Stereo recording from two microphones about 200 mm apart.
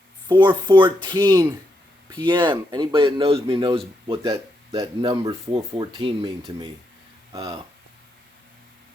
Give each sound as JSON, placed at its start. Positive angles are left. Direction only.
{"t": 0.3, "sound": "speech", "side_deg": -25}